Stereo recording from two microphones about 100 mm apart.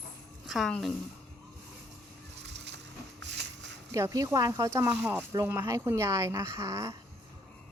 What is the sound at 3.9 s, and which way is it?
Speech, 35° right (ahead or behind).